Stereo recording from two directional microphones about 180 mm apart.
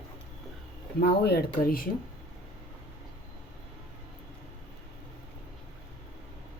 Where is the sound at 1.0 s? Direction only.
60° left (ahead or behind).